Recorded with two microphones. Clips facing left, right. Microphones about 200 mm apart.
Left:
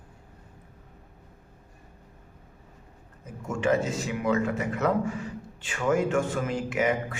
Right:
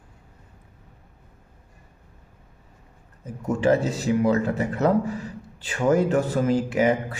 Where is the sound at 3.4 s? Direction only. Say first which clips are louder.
Right 5 dB; 35° right (ahead or behind).